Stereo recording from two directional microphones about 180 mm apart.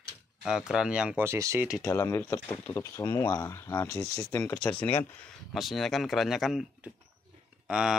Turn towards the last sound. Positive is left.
turn(degrees=-5)  # may be behind; listen again after turning